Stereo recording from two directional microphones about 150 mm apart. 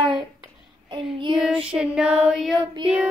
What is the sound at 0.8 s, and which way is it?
Child singing, 30° right (ahead or behind).